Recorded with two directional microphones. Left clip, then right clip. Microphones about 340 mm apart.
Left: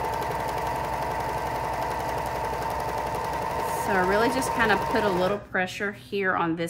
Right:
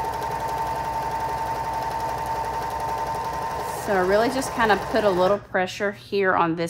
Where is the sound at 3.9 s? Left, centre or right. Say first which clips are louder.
Right 3 dB; centre.